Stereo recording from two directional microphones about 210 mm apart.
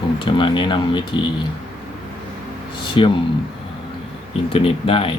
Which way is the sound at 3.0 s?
25° left (ahead or behind).